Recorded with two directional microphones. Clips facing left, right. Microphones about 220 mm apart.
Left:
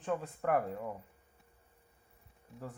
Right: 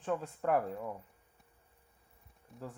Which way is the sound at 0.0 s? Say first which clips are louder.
Even; 10° left (ahead or behind).